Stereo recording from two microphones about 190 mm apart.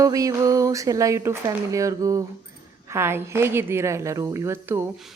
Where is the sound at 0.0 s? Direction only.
15° right (ahead or behind).